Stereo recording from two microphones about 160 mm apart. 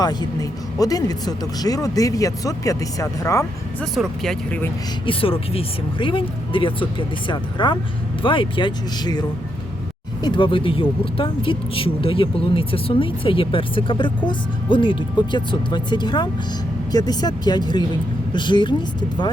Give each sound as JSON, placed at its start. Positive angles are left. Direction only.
{"t": 0.0, "sound": "speech", "side_deg": 25}
{"t": 3.8, "sound": "speech", "side_deg": 0}
{"t": 5.0, "sound": "speech", "side_deg": 35}
{"t": 10.2, "sound": "speech", "side_deg": 30}